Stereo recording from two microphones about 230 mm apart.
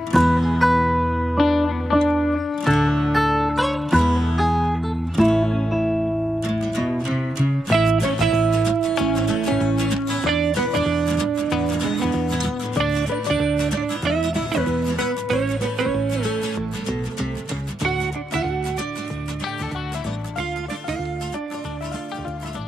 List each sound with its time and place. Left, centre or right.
0.1 s music: centre
17.8 s music: centre